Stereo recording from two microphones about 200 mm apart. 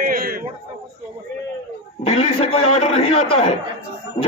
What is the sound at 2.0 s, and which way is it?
A man's voice, 30° left (ahead or behind).